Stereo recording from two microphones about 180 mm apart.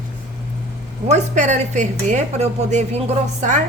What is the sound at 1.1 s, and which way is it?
A woman's voice, 40° right (ahead or behind).